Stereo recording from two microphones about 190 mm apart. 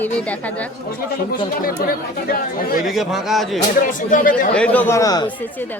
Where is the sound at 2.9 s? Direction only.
Centre (ahead or behind).